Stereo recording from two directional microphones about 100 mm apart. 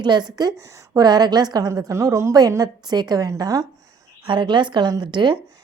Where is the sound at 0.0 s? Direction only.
45° right (ahead or behind).